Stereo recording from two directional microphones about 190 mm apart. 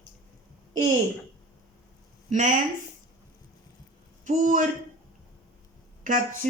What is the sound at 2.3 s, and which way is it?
Speech, 40° right (ahead or behind).